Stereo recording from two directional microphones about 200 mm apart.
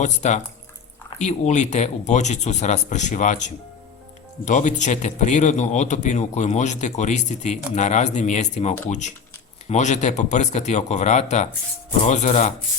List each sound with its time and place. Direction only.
0.0 s a man's voice: 35° left (ahead or behind)